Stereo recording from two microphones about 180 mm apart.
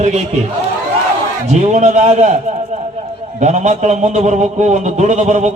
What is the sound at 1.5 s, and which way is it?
Speech, 40° right (ahead or behind).